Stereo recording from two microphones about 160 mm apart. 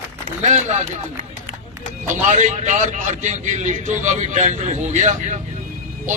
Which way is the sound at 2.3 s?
45° right (ahead or behind).